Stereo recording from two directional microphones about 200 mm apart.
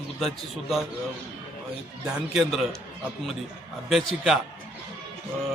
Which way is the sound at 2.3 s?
Centre (ahead or behind).